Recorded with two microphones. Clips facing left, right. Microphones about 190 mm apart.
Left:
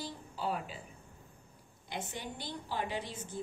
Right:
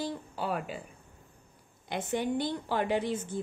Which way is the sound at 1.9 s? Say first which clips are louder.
Right 11 dB; 60° right (ahead or behind).